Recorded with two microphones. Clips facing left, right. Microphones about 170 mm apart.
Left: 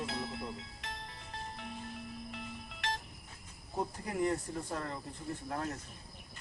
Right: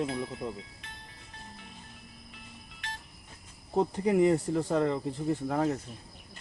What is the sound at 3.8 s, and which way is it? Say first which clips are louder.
Speech: right 10 dB; 75° right (ahead or behind).